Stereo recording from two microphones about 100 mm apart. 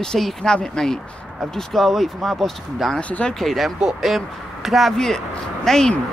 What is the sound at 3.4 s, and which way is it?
Speech, centre (ahead or behind).